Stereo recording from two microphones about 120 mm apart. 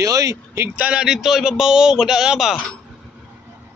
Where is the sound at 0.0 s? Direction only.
30° right (ahead or behind).